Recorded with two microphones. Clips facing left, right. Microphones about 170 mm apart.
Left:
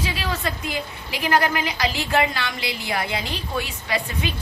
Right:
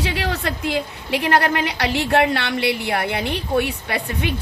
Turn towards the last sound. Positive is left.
turn(degrees=-60)  # may be behind; listen again after turning